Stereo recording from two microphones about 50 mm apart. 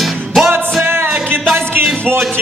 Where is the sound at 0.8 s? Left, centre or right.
Right.